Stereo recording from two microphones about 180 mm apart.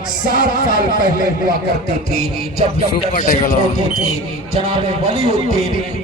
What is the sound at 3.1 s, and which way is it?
Speech, 45° left (ahead or behind).